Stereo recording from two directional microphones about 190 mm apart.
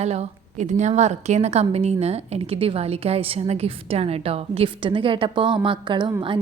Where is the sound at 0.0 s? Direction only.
35° right (ahead or behind).